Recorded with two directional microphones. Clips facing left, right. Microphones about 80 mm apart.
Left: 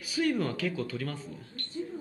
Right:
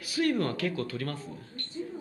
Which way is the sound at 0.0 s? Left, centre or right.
Centre.